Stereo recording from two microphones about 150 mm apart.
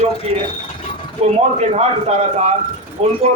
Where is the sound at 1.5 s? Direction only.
45° right (ahead or behind).